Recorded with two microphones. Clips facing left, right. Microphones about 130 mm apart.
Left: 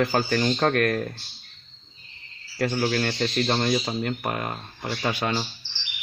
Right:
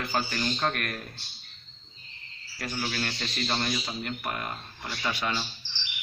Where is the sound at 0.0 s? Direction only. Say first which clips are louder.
Left 8 dB; 40° left (ahead or behind).